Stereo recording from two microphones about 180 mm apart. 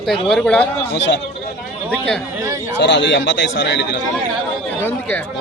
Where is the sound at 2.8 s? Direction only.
80° left.